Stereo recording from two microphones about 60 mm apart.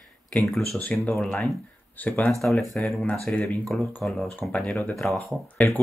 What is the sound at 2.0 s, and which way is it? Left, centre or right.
Speech, left.